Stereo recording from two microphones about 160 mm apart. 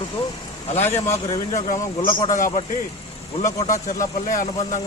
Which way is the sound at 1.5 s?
55° left (ahead or behind).